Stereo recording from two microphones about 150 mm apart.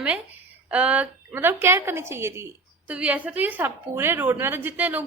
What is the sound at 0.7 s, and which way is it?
A woman's voice, 10° right (ahead or behind).